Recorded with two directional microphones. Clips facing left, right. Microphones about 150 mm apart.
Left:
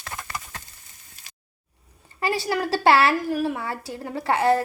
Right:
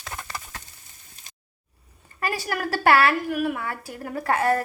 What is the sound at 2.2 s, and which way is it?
A woman's voice, 30° left (ahead or behind).